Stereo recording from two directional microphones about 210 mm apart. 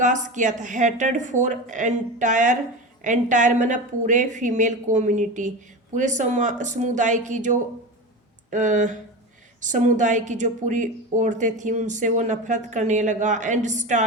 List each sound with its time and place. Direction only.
0.0 s speech: 35° right (ahead or behind)